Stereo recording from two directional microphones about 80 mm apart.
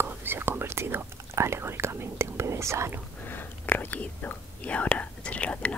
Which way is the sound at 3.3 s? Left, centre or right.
Left.